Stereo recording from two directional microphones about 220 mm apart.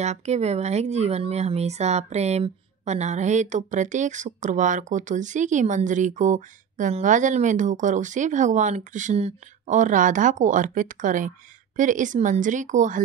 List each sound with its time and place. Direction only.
0.0 s speech: 30° right (ahead or behind)